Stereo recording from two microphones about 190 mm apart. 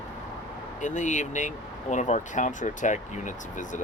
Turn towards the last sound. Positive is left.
turn(degrees=40)  # may be behind; listen again after turning